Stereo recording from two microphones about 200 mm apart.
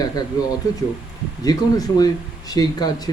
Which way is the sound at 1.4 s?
20° left (ahead or behind).